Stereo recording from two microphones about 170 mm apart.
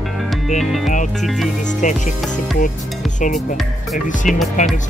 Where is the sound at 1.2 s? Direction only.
Centre (ahead or behind).